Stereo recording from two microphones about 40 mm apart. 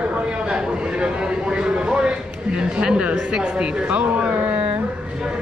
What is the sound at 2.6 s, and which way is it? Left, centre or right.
Speech, right.